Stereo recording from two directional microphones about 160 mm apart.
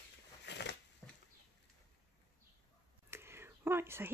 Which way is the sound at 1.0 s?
5° left (ahead or behind).